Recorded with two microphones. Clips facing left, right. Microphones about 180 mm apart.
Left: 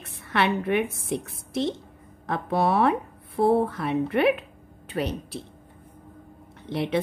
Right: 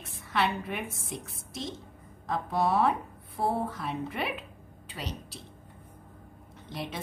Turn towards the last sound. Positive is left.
turn(degrees=65)  # may be behind; listen again after turning